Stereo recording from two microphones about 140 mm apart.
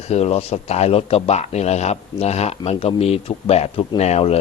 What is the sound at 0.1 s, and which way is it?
A man's voice, 50° left (ahead or behind).